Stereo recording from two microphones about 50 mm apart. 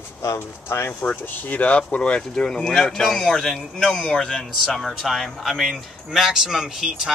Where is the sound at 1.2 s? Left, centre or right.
Left; by 5.8 s centre.